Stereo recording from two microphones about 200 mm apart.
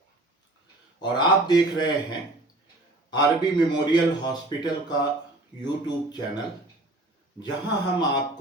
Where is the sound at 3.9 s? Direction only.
20° left (ahead or behind).